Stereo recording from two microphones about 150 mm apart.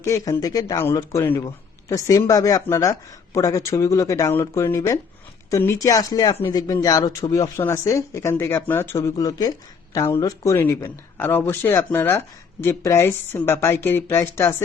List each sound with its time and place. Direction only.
0.0 s speech: 20° left (ahead or behind)